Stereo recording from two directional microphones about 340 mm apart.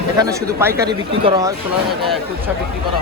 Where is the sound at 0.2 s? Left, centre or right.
Centre.